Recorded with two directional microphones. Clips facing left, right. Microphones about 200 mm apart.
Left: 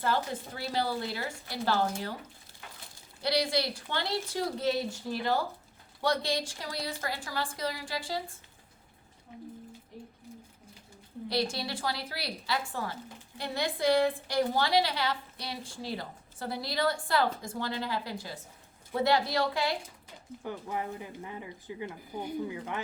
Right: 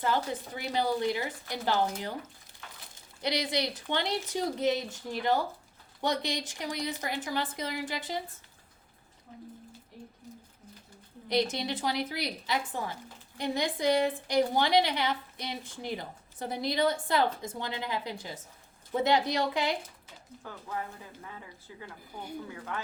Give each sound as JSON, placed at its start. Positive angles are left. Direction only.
{"t": 0.0, "sound": "a woman's voice", "side_deg": -15}
{"t": 11.3, "sound": "a woman's voice", "side_deg": -20}
{"t": 20.4, "sound": "speech", "side_deg": 20}